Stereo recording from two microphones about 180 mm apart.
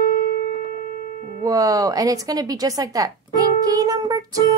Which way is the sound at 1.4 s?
20° right (ahead or behind).